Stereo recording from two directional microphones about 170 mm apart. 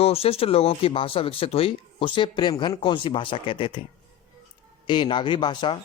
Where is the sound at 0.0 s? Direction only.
35° left (ahead or behind).